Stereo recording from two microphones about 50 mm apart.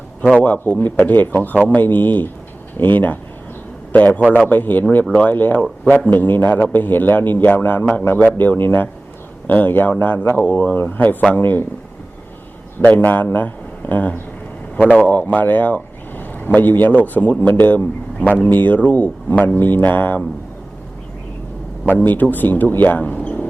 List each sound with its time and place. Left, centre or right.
0.3 s a man's voice: left
12.8 s a man's voice: left
22.0 s a man's voice: left